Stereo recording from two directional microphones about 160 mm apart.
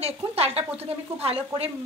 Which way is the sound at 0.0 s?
40° right (ahead or behind).